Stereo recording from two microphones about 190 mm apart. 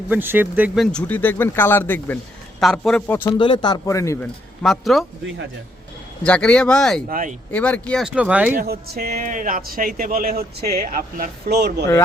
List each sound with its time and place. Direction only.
0.1 s speech: 10° right (ahead or behind)
0.9 s speech: 10° left (ahead or behind)
3.3 s speech: 25° left (ahead or behind)
4.6 s speech: centre (ahead or behind)
6.2 s speech: 5° left (ahead or behind)
7.1 s speech: 45° right (ahead or behind)
7.5 s speech: 5° left (ahead or behind)
8.0 s speech: 5° right (ahead or behind)
8.5 s speech: 55° right (ahead or behind)